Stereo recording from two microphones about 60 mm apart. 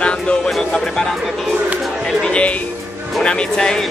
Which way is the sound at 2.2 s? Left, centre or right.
Centre.